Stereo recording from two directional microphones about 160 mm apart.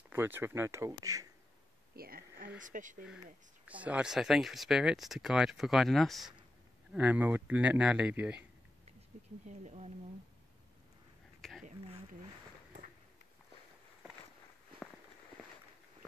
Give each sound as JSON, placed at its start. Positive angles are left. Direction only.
{"t": 0.1, "sound": "speech", "side_deg": -15}
{"t": 2.0, "sound": "speech", "side_deg": -65}
{"t": 2.6, "sound": "speech", "side_deg": -55}
{"t": 3.6, "sound": "speech", "side_deg": -10}
{"t": 9.5, "sound": "speech", "side_deg": -45}
{"t": 11.4, "sound": "a sound", "side_deg": 0}